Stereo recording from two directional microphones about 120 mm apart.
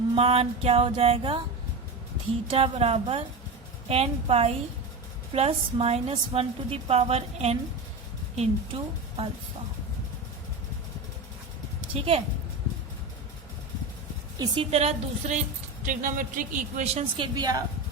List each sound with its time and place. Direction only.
0.1 s music: 55° right (ahead or behind)
2.5 s a woman's voice: 55° right (ahead or behind)
8.4 s music: 50° right (ahead or behind)
14.3 s music: 40° right (ahead or behind); by 15.4 s 60° right (ahead or behind)
15.9 s a man's voice: 90° right; by 17.1 s 70° right (ahead or behind)
17.2 s a woman's voice: 35° right (ahead or behind)